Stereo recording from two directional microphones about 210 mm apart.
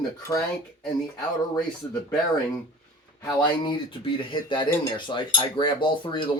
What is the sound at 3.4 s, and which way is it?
Speech, 20° left (ahead or behind).